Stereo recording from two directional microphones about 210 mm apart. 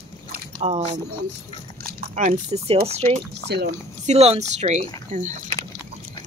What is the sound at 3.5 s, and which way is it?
Speech, 50° right (ahead or behind).